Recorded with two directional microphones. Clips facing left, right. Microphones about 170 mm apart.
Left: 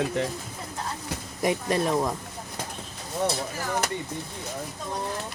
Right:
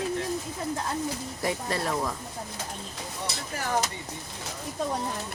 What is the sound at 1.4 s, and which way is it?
Speech, 20° left (ahead or behind).